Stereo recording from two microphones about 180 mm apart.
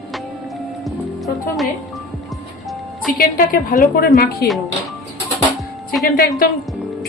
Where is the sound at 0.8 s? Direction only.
Centre (ahead or behind).